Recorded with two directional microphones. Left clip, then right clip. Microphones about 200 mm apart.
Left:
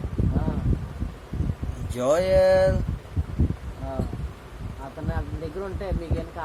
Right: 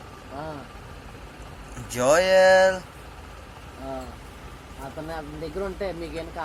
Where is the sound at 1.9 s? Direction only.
15° left (ahead or behind).